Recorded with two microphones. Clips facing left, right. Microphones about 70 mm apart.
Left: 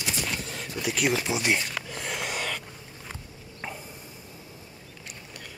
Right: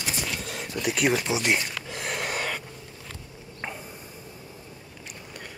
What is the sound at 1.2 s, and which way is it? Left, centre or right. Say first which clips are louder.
Speech: right 1 dB; centre.